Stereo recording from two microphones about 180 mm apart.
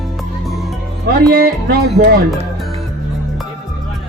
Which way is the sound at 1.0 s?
55° right (ahead or behind).